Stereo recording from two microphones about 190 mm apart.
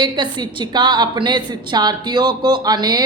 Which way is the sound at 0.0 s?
25° right (ahead or behind).